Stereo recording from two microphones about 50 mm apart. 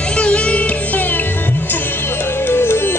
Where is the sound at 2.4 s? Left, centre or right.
Left.